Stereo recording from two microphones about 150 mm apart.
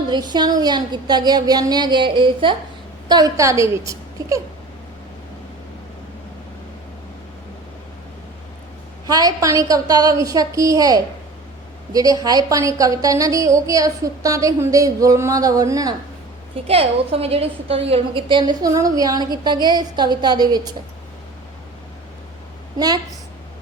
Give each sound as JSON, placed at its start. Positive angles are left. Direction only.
{"t": 0.1, "sound": "a woman's voice", "side_deg": -30}
{"t": 9.0, "sound": "a woman's voice", "side_deg": -25}
{"t": 16.6, "sound": "a woman's voice", "side_deg": -40}